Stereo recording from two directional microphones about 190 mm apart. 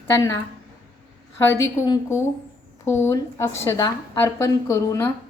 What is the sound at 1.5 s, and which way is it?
A woman's voice, 15° left (ahead or behind).